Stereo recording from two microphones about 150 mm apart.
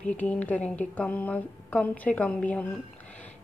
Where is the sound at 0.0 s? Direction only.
10° left (ahead or behind).